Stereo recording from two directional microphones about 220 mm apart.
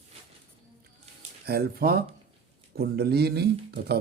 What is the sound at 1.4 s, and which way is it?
Speech, 45° right (ahead or behind).